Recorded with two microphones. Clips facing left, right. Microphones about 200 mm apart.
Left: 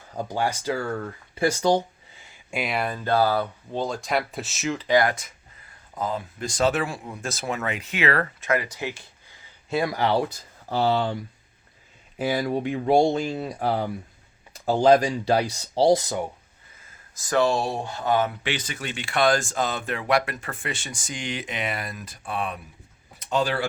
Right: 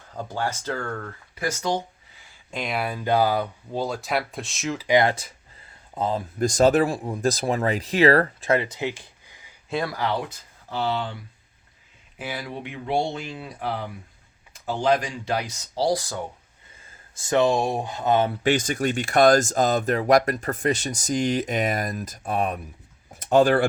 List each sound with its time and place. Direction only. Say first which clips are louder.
0.1 s speech: left 2 dB; 15° left (ahead or behind)
1.4 s speech: left 5 dB; 30° left (ahead or behind)
2.3 s speech: left 1 dB; 10° left (ahead or behind)
4.9 s speech: right 2 dB; 20° right (ahead or behind)
9.8 s speech: left 5 dB; 25° left (ahead or behind)
17.2 s speech: right 2 dB; 25° right (ahead or behind)
18.4 s speech: right 9 dB; 45° right (ahead or behind)
23.1 s a sound: right 7 dB; 50° right (ahead or behind)